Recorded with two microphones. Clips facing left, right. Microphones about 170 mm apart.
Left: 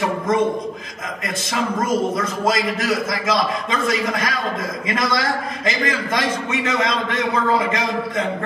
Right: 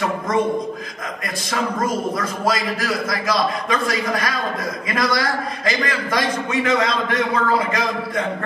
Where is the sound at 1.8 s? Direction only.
25° left (ahead or behind).